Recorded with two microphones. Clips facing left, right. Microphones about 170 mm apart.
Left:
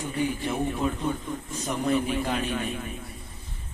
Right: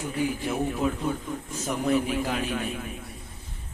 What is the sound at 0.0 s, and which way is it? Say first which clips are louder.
A man's voice: even; 5° right (ahead or behind).